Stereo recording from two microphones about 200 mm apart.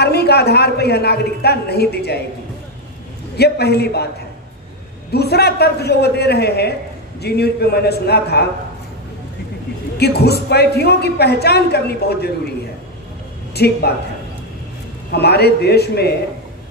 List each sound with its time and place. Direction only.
0.0 s a man's voice: 55° left (ahead or behind)
3.3 s a man's voice: 55° left (ahead or behind)
5.1 s a man's voice: 55° left (ahead or behind)
9.9 s a woman's voice: 55° left (ahead or behind)
13.6 s a man's voice: 55° left (ahead or behind)
15.0 s a man's voice: 55° left (ahead or behind)